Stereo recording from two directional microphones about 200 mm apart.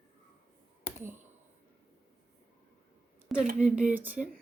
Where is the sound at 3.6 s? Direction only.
5° right (ahead or behind).